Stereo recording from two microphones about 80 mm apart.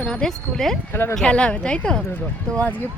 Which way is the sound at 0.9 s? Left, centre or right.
Left.